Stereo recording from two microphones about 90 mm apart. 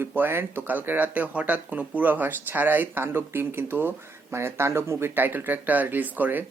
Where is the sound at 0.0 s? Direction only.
25° right (ahead or behind).